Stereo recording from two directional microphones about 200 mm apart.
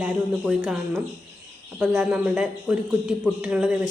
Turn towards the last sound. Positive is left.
turn(degrees=-5)  # may be behind; listen again after turning